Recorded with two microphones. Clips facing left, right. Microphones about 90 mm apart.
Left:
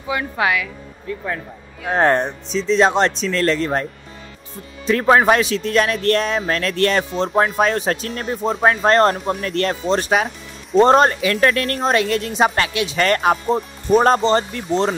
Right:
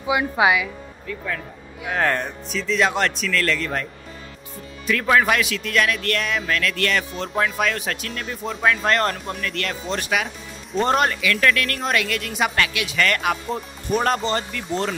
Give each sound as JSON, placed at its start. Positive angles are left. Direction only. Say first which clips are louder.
{"t": 0.0, "sound": "a woman's voice", "louder": "right 2 dB", "side_deg": -15}
{"t": 1.0, "sound": "speech", "louder": "left 3 dB", "side_deg": 25}